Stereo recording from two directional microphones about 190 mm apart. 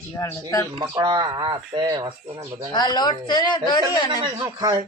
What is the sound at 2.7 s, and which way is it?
A man's voice, 20° left (ahead or behind).